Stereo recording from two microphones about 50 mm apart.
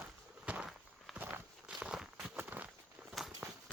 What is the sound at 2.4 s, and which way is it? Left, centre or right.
Walk, right.